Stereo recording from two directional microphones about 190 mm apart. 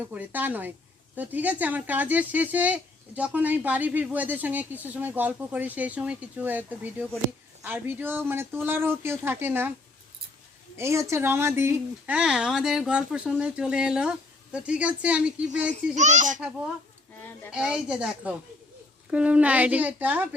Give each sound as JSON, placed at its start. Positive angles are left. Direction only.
{"t": 0.1, "sound": "speech", "side_deg": -10}
{"t": 10.8, "sound": "speech", "side_deg": -15}
{"t": 16.0, "sound": "speech", "side_deg": -40}
{"t": 17.5, "sound": "speech", "side_deg": -5}